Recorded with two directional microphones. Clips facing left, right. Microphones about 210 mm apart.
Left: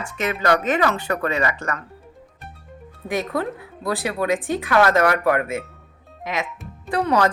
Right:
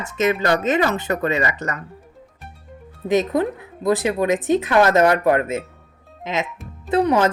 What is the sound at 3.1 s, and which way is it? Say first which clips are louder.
A woman's voice: right 6 dB; 20° right (ahead or behind).